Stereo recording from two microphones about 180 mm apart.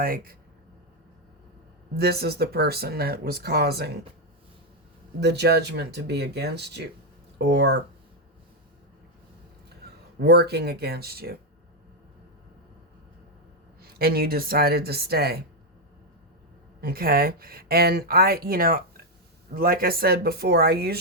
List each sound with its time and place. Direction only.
0.0 s speech: 55° right (ahead or behind)
2.0 s speech: 60° right (ahead or behind)
5.2 s speech: 65° right (ahead or behind)
9.8 s a sound: 65° right (ahead or behind)
10.2 s speech: 65° right (ahead or behind)
13.8 s speech: 60° right (ahead or behind)
16.8 s speech: 55° right (ahead or behind)